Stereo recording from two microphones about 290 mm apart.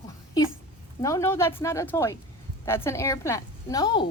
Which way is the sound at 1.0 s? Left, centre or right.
Centre.